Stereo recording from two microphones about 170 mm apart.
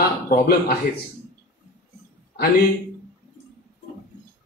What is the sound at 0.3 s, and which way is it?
Speech, 65° left (ahead or behind).